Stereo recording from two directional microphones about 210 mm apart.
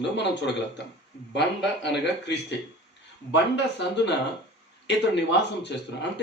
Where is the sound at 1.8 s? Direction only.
55° left (ahead or behind).